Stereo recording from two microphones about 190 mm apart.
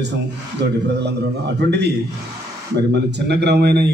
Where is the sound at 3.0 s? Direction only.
65° right (ahead or behind).